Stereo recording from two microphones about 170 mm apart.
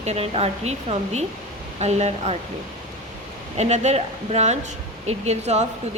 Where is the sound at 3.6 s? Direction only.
40° right (ahead or behind).